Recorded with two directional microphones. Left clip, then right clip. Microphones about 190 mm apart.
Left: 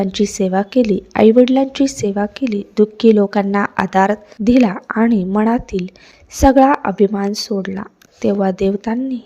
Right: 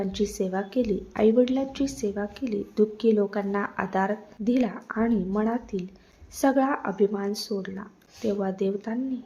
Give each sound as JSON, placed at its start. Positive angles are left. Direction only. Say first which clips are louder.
{"t": 0.0, "sound": "a woman's voice", "louder": "left 10 dB", "side_deg": 40}